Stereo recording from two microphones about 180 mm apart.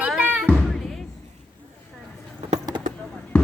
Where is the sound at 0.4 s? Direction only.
Centre (ahead or behind).